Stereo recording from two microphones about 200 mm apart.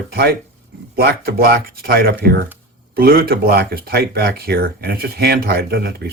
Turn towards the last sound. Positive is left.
turn(degrees=-55)  # may be behind; listen again after turning